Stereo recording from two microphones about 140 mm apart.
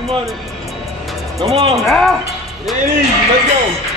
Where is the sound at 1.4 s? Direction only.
45° right (ahead or behind).